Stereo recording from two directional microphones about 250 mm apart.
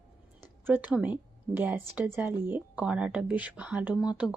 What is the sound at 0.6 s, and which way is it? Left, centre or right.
A woman's voice, centre.